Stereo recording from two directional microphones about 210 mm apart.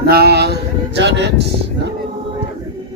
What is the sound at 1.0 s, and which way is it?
Speech, 55° right (ahead or behind).